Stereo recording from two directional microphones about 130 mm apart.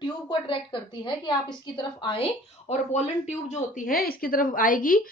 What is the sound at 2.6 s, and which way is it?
Speech, 60° left (ahead or behind).